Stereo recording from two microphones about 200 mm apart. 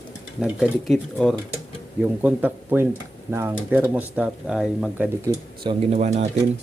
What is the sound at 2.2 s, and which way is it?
Speech, 10° right (ahead or behind).